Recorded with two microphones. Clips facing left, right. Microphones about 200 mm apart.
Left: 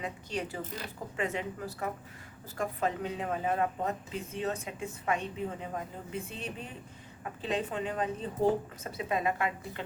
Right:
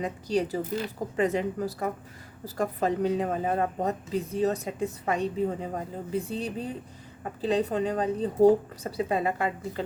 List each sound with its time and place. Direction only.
0.0 s a woman's voice: 35° right (ahead or behind)